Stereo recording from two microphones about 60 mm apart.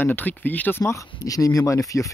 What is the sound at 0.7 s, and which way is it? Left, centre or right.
Speech, left.